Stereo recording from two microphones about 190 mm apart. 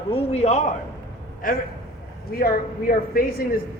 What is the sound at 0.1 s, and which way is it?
Speech, 35° left (ahead or behind).